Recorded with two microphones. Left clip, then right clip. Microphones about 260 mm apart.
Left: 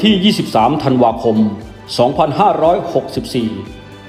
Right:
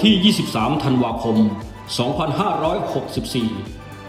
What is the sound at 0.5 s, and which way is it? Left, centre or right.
Speech, centre.